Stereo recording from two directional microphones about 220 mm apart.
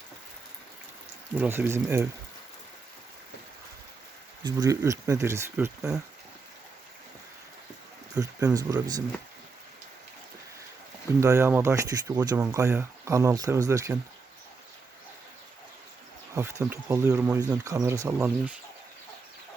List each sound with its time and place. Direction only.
1.4 s speech: 10° right (ahead or behind)
4.4 s speech: 15° right (ahead or behind)
8.1 s speech: 15° right (ahead or behind)
11.2 s speech: 10° right (ahead or behind)
16.3 s speech: 10° right (ahead or behind)